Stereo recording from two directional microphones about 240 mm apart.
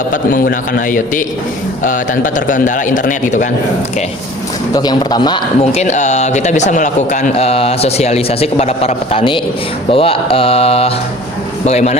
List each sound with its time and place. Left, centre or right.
0.1 s a man's voice: left
4.7 s speech: centre